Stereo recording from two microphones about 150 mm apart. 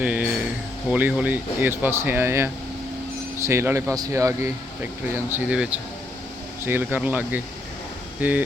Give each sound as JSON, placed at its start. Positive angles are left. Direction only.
{"t": 0.0, "sound": "speech", "side_deg": -10}